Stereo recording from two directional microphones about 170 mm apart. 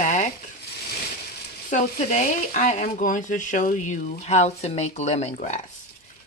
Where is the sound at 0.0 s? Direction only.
45° left (ahead or behind).